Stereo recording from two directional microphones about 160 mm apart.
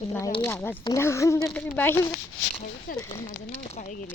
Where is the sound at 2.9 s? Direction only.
60° left (ahead or behind).